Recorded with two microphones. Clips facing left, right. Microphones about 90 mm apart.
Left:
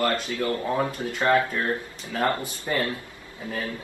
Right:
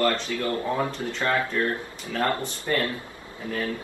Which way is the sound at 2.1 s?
15° left (ahead or behind).